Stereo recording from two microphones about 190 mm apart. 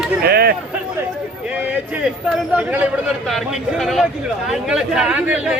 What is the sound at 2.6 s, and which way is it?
A man's voice, 5° right (ahead or behind).